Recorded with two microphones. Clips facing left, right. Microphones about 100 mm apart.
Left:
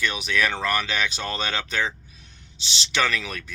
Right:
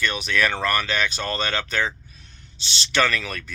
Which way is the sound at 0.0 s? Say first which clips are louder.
Right 1 dB; 15° left (ahead or behind).